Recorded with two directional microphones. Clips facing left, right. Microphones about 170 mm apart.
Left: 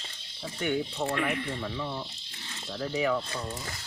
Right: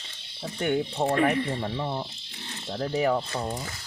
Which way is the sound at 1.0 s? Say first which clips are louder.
Right 6 dB; 35° right (ahead or behind).